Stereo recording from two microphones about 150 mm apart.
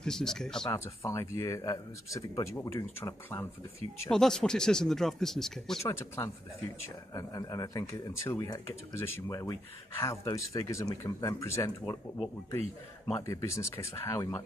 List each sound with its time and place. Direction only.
0.0 s speech: 5° left (ahead or behind)
0.7 s speech: 20° left (ahead or behind)
4.1 s speech: 5° left (ahead or behind)
5.9 s speech: 20° left (ahead or behind)
13.1 s speech: 20° left (ahead or behind)